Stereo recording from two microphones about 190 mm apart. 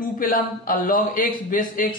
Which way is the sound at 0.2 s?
45° left (ahead or behind).